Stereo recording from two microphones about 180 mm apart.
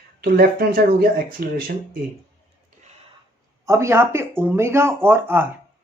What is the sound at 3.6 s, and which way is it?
Speech, 15° right (ahead or behind).